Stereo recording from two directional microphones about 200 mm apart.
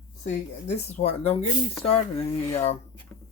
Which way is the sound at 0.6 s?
35° left (ahead or behind).